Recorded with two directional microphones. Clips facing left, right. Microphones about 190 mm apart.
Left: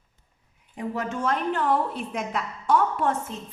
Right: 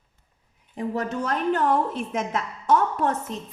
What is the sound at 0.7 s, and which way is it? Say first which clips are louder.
A woman's voice: right 2 dB; 35° right (ahead or behind).